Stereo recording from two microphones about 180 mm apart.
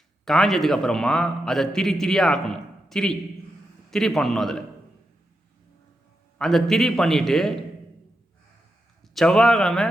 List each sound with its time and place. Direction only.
0.3 s a man's voice: centre (ahead or behind)
6.4 s a man's voice: centre (ahead or behind)
9.1 s a man's voice: 5° left (ahead or behind)